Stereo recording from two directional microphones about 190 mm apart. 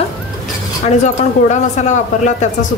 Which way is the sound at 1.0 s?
40° left (ahead or behind).